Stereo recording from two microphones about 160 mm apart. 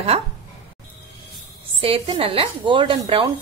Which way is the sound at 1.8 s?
35° right (ahead or behind).